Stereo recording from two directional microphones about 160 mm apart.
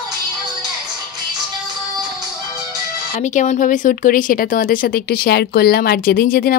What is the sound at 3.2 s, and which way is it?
Speech, 50° left (ahead or behind).